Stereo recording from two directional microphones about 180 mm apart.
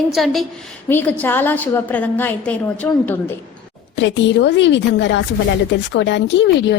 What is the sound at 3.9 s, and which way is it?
A woman's voice, 85° left.